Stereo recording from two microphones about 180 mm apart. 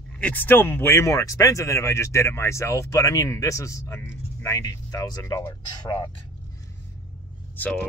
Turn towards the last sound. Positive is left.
turn(degrees=10)  # may be behind; listen again after turning